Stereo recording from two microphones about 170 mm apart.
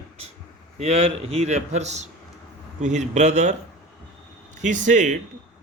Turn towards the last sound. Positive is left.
turn(degrees=-45)  # may be behind; listen again after turning